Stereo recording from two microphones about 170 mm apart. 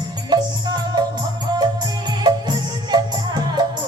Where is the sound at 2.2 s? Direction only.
25° right (ahead or behind).